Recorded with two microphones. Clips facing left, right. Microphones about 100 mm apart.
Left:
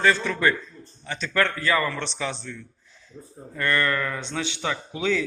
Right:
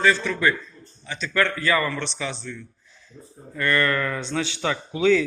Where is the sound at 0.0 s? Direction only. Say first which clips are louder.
Right 1 dB; 45° left (ahead or behind).